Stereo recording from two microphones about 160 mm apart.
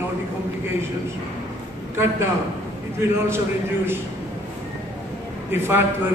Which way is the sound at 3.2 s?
15° right (ahead or behind).